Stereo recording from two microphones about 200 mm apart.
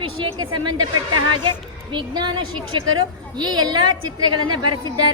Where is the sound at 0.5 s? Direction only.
20° right (ahead or behind).